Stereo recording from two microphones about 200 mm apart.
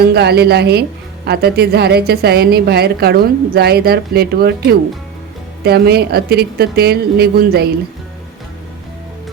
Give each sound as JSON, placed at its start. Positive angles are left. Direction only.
{"t": 0.0, "sound": "a woman's voice", "side_deg": -55}
{"t": 5.6, "sound": "a woman's voice", "side_deg": -50}